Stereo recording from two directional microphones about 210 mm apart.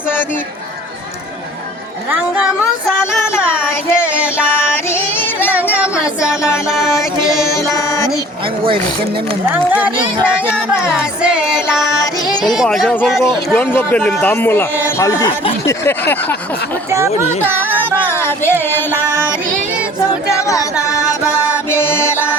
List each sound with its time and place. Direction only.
2.0 s speech: 5° right (ahead or behind)
4.1 s music: 5° right (ahead or behind)
4.7 s music: 10° left (ahead or behind)
6.7 s music: centre (ahead or behind)
7.2 s child singing: 15° left (ahead or behind)
9.5 s speech: 5° right (ahead or behind)
10.2 s music: 5° right (ahead or behind)
12.2 s a sound: 20° left (ahead or behind)
12.5 s speech: centre (ahead or behind)
18.1 s music: 10° left (ahead or behind)
20.4 s music: 15° left (ahead or behind)